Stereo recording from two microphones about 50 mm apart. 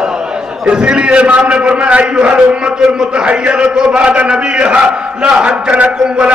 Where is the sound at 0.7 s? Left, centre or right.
Centre.